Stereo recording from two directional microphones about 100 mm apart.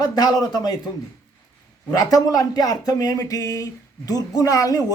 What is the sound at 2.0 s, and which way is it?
Speech, 35° left (ahead or behind).